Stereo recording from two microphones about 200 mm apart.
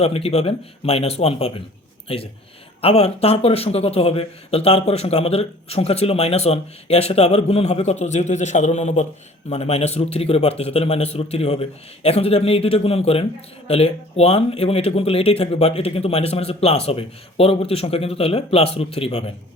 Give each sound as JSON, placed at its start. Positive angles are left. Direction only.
{"t": 0.0, "sound": "speech", "side_deg": 30}
{"t": 2.8, "sound": "speech", "side_deg": 30}